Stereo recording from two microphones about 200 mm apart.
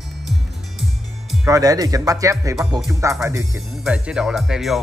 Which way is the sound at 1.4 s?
15° right (ahead or behind).